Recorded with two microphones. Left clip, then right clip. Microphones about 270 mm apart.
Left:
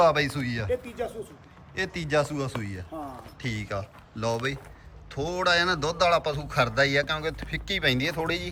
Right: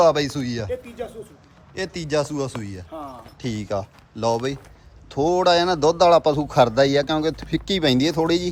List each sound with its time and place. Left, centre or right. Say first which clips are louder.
0.0 s a man's voice: right 4 dB; centre